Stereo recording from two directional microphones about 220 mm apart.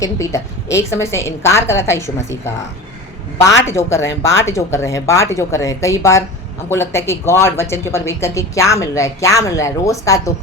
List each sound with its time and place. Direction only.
0.0 s a woman's voice: 15° left (ahead or behind)
3.7 s a woman's voice: 15° left (ahead or behind)